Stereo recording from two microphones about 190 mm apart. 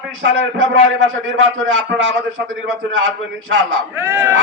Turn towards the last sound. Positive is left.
turn(degrees=-10)  # may be behind; listen again after turning